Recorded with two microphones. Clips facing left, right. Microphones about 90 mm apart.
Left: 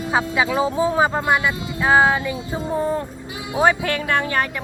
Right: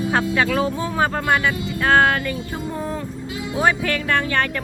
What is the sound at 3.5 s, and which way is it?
Speech, 20° left (ahead or behind).